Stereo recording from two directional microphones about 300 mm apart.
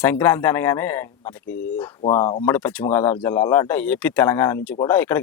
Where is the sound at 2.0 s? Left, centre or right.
Centre.